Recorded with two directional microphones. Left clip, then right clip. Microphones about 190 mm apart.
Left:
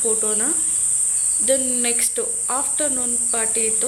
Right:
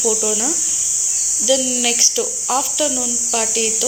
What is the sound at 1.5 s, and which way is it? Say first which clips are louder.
Speech: right 4 dB; 10° right (ahead or behind).